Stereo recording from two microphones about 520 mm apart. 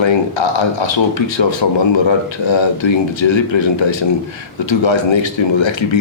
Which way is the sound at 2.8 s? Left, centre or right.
Left.